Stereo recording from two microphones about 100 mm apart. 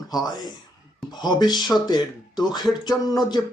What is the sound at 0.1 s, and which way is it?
Speech, 45° left (ahead or behind).